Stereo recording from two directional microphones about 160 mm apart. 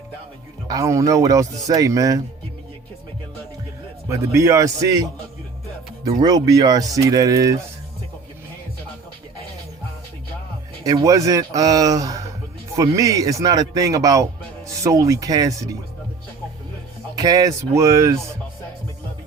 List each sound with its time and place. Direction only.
0.7 s speech: 20° right (ahead or behind)
4.1 s speech: 20° right (ahead or behind)
6.1 s speech: 25° right (ahead or behind)
10.8 s speech: 20° right (ahead or behind)
17.2 s speech: 25° right (ahead or behind)